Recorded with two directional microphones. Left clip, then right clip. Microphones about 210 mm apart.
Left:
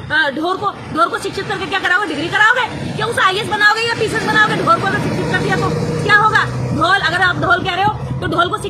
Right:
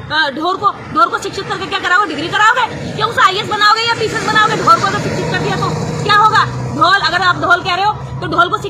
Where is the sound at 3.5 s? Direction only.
30° left (ahead or behind).